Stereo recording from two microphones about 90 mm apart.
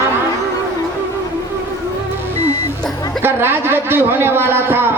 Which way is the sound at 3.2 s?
25° right (ahead or behind).